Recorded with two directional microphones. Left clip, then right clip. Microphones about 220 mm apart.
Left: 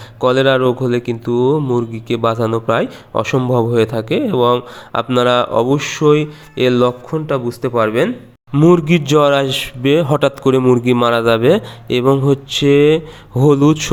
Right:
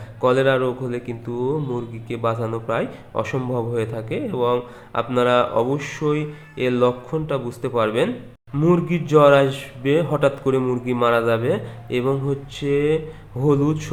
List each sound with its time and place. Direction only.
0.2 s speech: 40° left (ahead or behind)
8.5 s speech: 40° left (ahead or behind)